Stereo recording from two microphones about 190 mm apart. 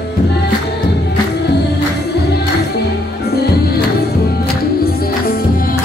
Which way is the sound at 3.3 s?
55° left (ahead or behind).